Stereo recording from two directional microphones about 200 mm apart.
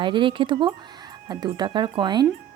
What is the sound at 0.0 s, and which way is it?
A woman's voice, 25° right (ahead or behind).